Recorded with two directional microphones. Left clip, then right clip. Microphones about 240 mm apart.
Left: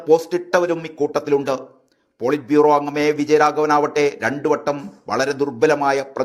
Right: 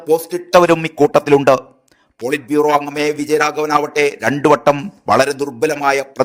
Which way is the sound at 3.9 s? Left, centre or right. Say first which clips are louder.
Right 3 dB; right.